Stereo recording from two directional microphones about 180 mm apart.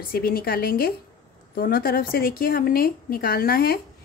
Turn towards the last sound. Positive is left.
turn(degrees=55)  # may be behind; listen again after turning